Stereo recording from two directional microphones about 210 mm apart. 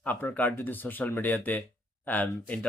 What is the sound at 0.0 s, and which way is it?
Speech, 10° left (ahead or behind).